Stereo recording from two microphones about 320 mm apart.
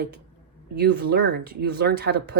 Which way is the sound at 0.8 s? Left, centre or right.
Right.